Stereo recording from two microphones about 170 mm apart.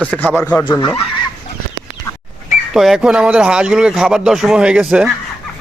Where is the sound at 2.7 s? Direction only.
Centre (ahead or behind).